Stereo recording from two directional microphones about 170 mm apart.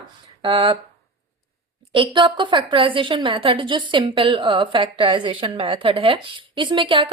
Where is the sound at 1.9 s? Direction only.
30° right (ahead or behind).